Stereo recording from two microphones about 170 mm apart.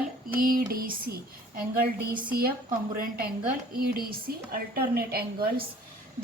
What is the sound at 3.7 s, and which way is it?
A woman's voice, 60° right (ahead or behind).